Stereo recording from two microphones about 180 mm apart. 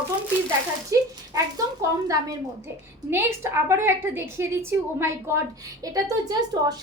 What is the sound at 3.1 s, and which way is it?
A woman's voice, 15° right (ahead or behind).